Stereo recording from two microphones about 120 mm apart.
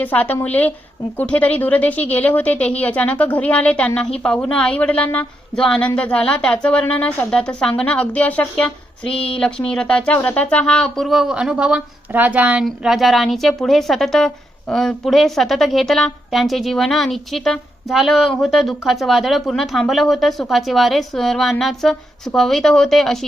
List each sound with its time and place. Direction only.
0.0 s a woman's voice: 15° left (ahead or behind)
9.1 s speech: 50° left (ahead or behind)
9.4 s a woman's voice: 5° left (ahead or behind); by 12.6 s 15° right (ahead or behind)
12.6 s a woman's voice: centre (ahead or behind)